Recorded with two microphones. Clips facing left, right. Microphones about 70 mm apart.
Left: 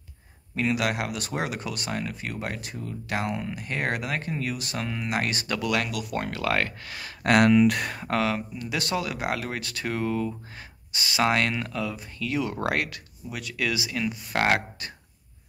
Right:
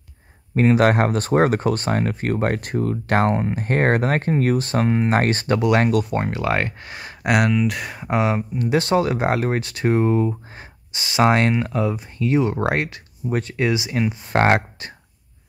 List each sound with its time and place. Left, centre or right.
0.6 s speech: right
7.2 s speech: centre
8.1 s speech: right